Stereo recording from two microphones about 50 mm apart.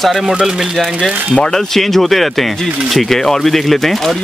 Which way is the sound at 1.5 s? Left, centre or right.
Centre.